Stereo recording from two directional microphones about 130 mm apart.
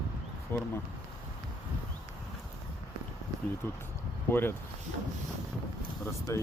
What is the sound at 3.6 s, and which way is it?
Speech, 15° left (ahead or behind).